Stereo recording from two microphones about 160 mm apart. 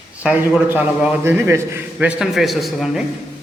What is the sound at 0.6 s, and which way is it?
A man's voice, 10° right (ahead or behind).